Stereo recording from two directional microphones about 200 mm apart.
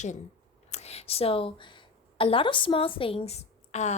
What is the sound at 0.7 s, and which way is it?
A woman's voice, 30° left (ahead or behind).